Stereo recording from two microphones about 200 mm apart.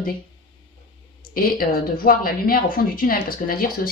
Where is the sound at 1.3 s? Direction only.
45° left (ahead or behind).